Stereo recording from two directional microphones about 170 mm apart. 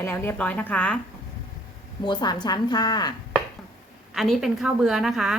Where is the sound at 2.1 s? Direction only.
25° left (ahead or behind).